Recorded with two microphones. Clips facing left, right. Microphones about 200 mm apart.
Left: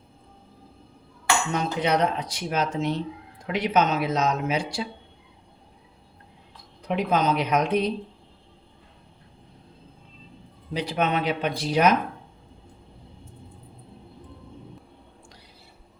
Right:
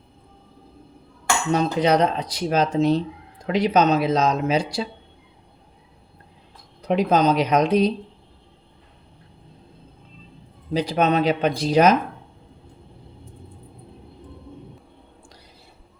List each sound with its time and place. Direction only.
1.5 s speech: 35° right (ahead or behind)
6.8 s speech: 40° right (ahead or behind)
10.8 s speech: 40° right (ahead or behind)